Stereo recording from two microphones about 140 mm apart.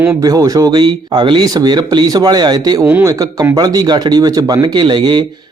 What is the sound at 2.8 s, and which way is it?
A man's voice, 15° right (ahead or behind).